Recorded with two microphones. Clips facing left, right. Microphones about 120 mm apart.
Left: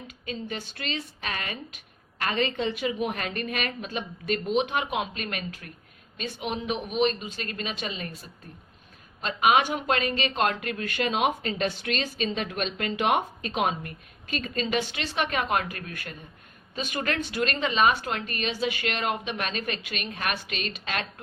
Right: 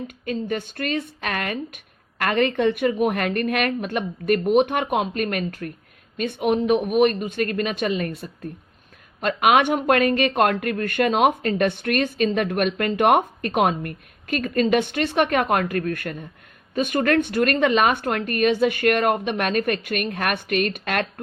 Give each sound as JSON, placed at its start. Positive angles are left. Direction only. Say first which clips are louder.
{"t": 0.1, "sound": "speech", "louder": "right 6 dB", "side_deg": -55}